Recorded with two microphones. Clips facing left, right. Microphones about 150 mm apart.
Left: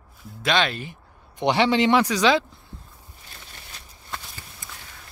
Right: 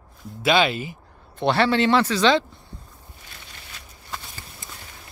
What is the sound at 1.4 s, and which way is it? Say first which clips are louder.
Speech: even; 15° left (ahead or behind).